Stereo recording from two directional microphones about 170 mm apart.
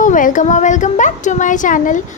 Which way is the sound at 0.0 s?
50° left (ahead or behind).